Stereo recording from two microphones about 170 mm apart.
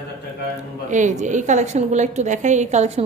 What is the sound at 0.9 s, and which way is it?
A woman's voice, 45° right (ahead or behind).